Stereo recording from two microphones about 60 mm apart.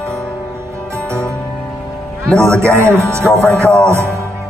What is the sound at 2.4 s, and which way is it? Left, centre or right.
A man's voice, right.